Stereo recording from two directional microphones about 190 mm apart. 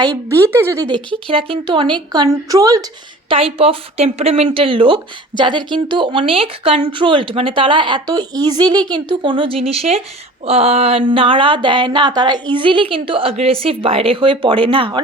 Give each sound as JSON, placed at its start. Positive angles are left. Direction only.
{"t": 0.5, "sound": "speech", "side_deg": -15}
{"t": 1.3, "sound": "a woman's voice", "side_deg": -30}
{"t": 3.2, "sound": "a woman's voice", "side_deg": -30}